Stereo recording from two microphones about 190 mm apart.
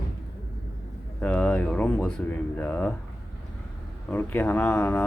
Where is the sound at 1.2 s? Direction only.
5° left (ahead or behind).